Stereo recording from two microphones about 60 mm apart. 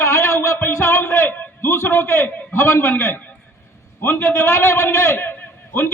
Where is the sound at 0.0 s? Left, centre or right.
Left.